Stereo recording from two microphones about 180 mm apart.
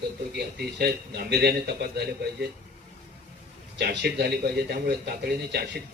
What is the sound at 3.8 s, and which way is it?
A man's voice, 70° right (ahead or behind).